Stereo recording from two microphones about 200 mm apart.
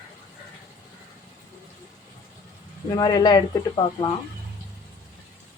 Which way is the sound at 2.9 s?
20° left (ahead or behind).